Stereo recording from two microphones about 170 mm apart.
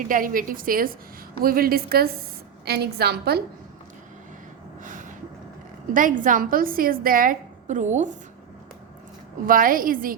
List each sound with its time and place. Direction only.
0.0 s a woman's voice: 50° right (ahead or behind); by 3.4 s 70° right (ahead or behind)
4.8 s vehicle: 50° right (ahead or behind)
5.9 s a woman's voice: 50° right (ahead or behind)
9.5 s a woman's voice: 55° right (ahead or behind)